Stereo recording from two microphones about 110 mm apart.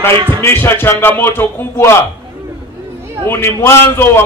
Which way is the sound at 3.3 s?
25° left (ahead or behind).